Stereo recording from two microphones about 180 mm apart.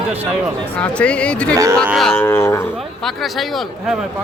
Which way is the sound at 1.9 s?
Centre (ahead or behind).